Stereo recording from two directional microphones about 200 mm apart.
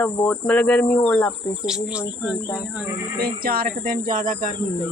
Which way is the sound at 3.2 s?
50° right (ahead or behind).